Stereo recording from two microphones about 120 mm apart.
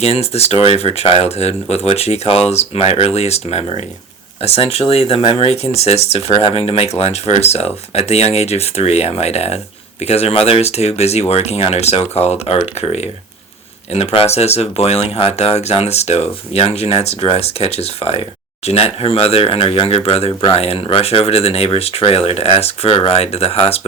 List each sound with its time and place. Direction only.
0.0 s speech: 60° left (ahead or behind)